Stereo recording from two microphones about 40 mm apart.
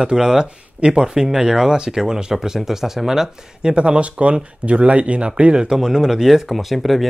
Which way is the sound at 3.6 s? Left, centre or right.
Right.